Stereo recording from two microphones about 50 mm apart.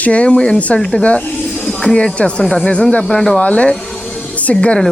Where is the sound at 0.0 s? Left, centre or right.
Left.